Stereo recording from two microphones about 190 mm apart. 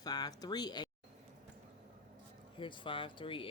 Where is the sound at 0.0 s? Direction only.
20° left (ahead or behind).